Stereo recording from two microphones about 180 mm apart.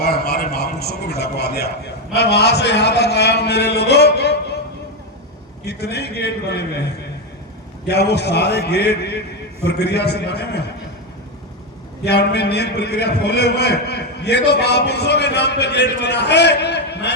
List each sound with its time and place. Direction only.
0.0 s a man's voice: 60° left (ahead or behind)
5.6 s a man's voice: 65° left (ahead or behind)
7.9 s a man's voice: 65° left (ahead or behind)
12.0 s a man's voice: 65° left (ahead or behind)